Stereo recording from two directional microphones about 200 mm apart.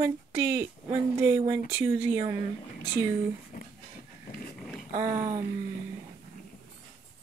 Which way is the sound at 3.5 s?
45° left (ahead or behind).